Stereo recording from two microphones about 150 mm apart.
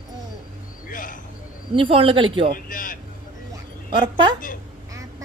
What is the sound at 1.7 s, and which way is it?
Speech, 35° right (ahead or behind).